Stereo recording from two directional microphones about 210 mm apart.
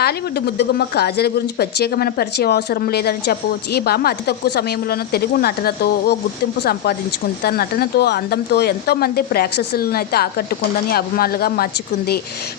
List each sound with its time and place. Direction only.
0.0 s speech: 50° left (ahead or behind)